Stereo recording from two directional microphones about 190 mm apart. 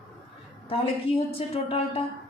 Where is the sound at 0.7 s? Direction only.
30° left (ahead or behind).